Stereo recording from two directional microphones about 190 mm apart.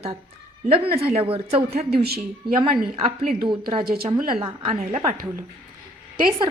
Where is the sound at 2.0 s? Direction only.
55° right (ahead or behind).